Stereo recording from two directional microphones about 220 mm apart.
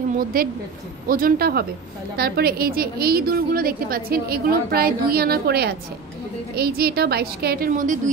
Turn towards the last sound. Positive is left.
turn(degrees=-35)  # may be behind; listen again after turning